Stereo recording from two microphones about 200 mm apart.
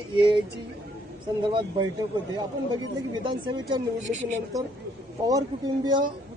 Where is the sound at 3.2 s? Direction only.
25° right (ahead or behind).